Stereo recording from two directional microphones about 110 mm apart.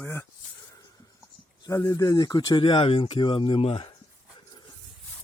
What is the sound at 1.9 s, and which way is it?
Speech, 35° left (ahead or behind).